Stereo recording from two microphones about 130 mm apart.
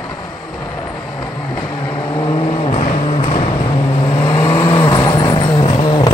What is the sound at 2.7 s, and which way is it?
Vehicle, 50° left (ahead or behind).